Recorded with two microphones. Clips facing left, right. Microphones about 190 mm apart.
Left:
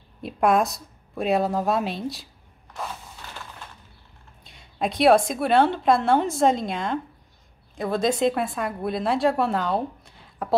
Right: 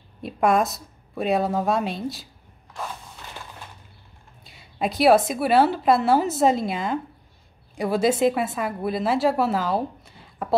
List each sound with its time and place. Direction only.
0.2 s a woman's voice: centre (ahead or behind)
4.5 s a woman's voice: 5° right (ahead or behind)